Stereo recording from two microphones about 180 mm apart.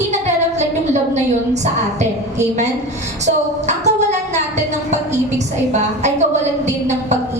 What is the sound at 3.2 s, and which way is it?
Speech, 40° right (ahead or behind).